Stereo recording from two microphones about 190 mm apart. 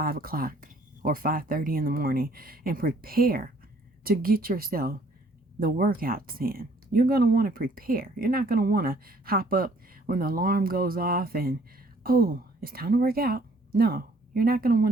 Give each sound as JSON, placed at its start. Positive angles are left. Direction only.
{"t": 0.0, "sound": "a woman's voice", "side_deg": -50}